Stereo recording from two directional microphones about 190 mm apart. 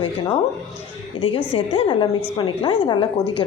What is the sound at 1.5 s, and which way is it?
A woman's voice, 30° left (ahead or behind).